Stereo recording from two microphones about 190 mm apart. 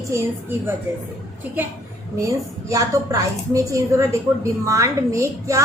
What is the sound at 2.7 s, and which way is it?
A woman's voice, 15° right (ahead or behind).